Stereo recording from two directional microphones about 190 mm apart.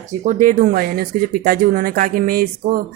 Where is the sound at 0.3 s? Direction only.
45° right (ahead or behind).